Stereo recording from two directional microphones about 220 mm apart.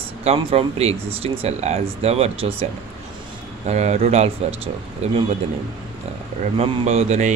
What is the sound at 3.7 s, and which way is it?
Speech, 30° right (ahead or behind).